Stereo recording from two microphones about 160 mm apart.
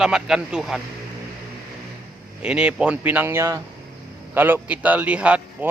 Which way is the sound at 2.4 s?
5° right (ahead or behind).